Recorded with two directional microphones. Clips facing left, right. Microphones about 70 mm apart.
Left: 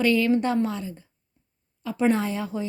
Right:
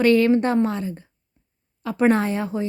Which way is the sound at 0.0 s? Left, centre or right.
Right.